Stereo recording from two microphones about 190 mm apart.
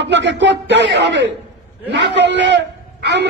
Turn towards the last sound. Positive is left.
turn(degrees=-65)  # may be behind; listen again after turning